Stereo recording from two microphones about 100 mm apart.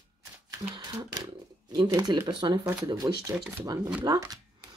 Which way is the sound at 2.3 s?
45° right (ahead or behind).